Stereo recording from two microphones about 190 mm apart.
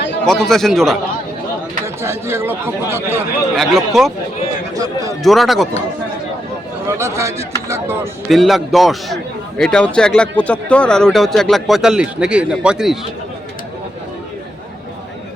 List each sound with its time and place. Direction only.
0.3 s a man's voice: centre (ahead or behind)
2.0 s speech: 15° right (ahead or behind)
3.5 s a man's voice: centre (ahead or behind)
4.7 s a sound: 20° right (ahead or behind)
5.2 s a man's voice: centre (ahead or behind)
6.8 s speech: 15° right (ahead or behind)
8.3 s a man's voice: centre (ahead or behind)